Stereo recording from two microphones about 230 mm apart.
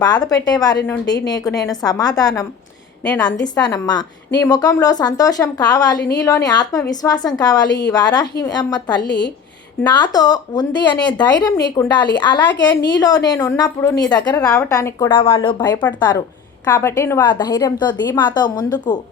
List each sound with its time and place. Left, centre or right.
0.3 s a woman's voice: centre
9.0 s a woman's voice: left
9.8 s a woman's voice: centre